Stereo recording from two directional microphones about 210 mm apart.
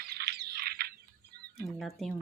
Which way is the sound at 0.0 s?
50° right (ahead or behind).